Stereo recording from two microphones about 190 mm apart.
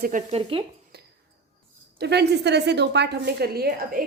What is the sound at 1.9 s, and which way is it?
A woman's voice, 60° right (ahead or behind).